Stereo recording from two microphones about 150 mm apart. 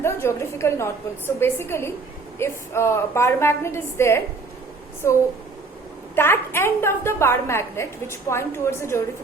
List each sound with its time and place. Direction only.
0.0 s a woman's voice: 15° left (ahead or behind)